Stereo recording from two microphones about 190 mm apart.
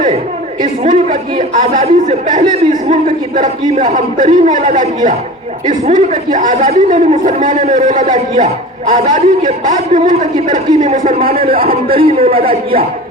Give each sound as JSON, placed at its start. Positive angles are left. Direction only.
{"t": 0.6, "sound": "a man's voice", "side_deg": -40}
{"t": 12.3, "sound": "a man's voice", "side_deg": -30}